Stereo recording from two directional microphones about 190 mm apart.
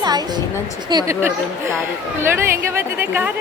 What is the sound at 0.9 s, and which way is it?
Speech, 20° right (ahead or behind).